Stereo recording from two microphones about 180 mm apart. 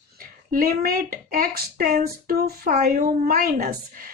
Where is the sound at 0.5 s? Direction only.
55° right (ahead or behind).